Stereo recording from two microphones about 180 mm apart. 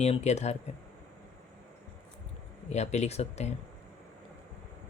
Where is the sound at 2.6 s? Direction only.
40° left (ahead or behind).